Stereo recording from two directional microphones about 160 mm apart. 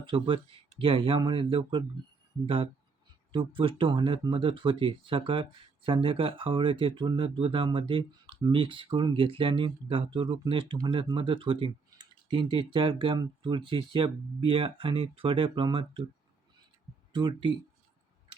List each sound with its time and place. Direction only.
0.0 s speech: 30° right (ahead or behind)
3.3 s speech: 30° right (ahead or behind)
17.1 s speech: 30° right (ahead or behind)